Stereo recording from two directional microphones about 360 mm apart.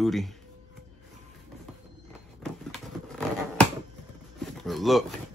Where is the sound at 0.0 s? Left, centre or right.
Centre.